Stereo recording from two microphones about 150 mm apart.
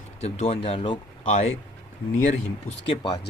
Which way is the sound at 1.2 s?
50° left (ahead or behind).